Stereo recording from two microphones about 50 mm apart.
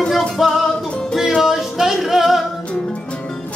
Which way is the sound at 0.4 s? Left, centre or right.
Centre.